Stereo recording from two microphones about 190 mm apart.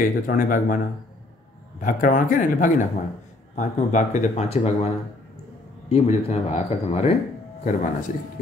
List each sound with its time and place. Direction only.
0.0 s speech: 45° left (ahead or behind)
1.8 s speech: 45° left (ahead or behind)
5.9 s speech: 35° left (ahead or behind)